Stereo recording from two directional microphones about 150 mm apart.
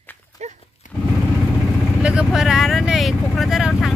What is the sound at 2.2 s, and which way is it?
Speech, 5° right (ahead or behind).